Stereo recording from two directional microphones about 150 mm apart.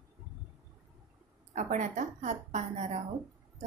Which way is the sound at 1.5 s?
55° right (ahead or behind).